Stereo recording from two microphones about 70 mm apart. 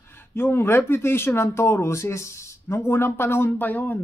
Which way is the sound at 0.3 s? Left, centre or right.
Left.